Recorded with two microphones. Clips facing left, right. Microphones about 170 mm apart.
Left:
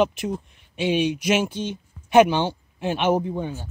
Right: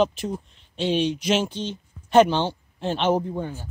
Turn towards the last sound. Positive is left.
turn(degrees=20)  # may be behind; listen again after turning